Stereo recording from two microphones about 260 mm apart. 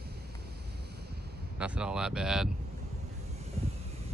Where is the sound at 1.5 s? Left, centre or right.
Centre.